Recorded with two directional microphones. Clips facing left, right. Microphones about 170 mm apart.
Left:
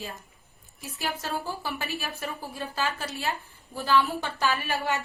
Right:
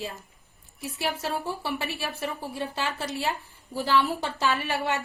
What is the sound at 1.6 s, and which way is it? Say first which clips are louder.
A woman's voice: right 2 dB; 25° right (ahead or behind).